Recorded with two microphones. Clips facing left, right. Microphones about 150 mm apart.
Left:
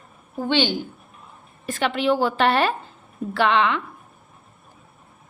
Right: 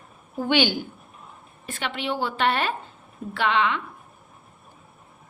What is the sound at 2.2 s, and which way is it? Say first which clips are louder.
Speech: left 5 dB; 35° left (ahead or behind).